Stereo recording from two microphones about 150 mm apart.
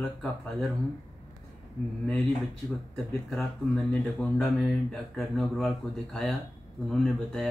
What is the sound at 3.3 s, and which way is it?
Speech, centre (ahead or behind).